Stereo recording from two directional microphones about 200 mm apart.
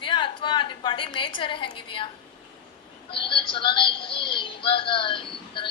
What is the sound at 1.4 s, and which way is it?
Speech, 25° left (ahead or behind).